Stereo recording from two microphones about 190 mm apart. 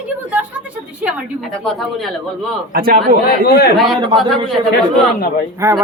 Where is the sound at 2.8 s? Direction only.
50° right (ahead or behind).